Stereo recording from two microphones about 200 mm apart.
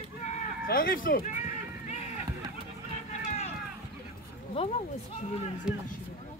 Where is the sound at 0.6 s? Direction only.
45° left (ahead or behind).